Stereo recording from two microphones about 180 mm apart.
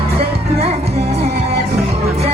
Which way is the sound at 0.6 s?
35° right (ahead or behind).